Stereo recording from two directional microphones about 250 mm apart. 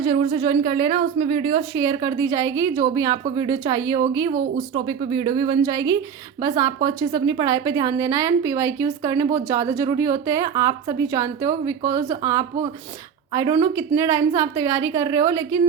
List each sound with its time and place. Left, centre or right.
0.0 s a woman's voice: centre
1.8 s a woman's voice: centre